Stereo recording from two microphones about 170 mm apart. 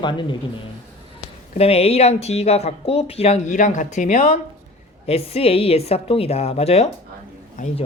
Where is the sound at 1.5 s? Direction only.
35° left (ahead or behind).